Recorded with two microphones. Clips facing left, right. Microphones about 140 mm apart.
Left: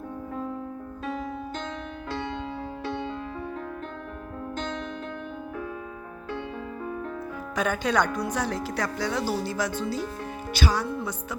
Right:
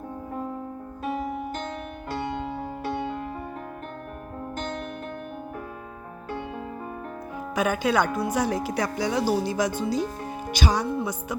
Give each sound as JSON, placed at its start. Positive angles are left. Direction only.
{"t": 1.0, "sound": "music", "side_deg": -10}
{"t": 7.5, "sound": "speech", "side_deg": -10}